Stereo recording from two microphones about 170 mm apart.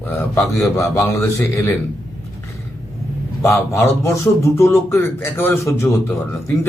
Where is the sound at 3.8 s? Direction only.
15° left (ahead or behind).